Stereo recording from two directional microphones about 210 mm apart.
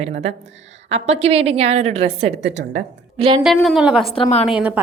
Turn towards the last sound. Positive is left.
turn(degrees=-5)  # may be behind; listen again after turning